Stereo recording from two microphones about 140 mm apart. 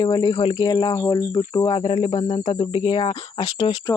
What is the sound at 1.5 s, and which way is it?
Speech, 35° left (ahead or behind).